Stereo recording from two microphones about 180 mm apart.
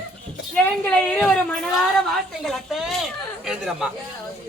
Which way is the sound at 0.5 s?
5° left (ahead or behind).